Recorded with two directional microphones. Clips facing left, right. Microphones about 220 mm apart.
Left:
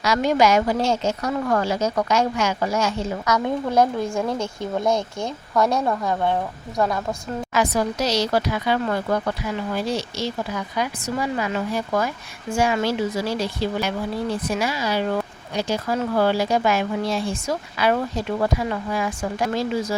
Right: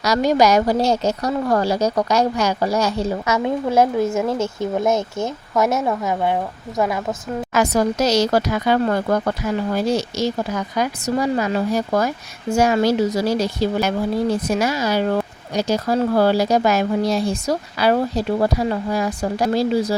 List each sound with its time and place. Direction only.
0.0 s speech: 40° right (ahead or behind); by 7.0 s 15° right (ahead or behind)
7.5 s speech: 45° right (ahead or behind)